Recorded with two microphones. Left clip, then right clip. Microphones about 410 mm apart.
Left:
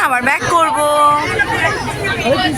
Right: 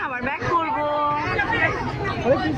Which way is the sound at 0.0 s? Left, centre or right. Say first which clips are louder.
Left 12 dB; right.